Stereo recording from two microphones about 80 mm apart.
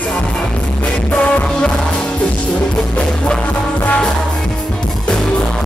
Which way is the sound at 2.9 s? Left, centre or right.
Centre.